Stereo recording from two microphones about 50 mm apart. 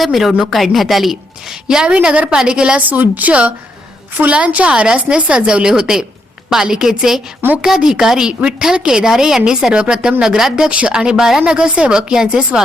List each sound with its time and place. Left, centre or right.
0.0 s a woman's voice: centre
1.6 s a woman's voice: centre
2.8 s a woman's voice: right; by 10.7 s centre
10.7 s a woman's voice: centre